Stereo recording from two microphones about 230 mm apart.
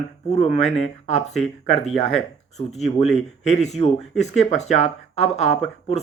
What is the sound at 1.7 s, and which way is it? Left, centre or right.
Speech, left.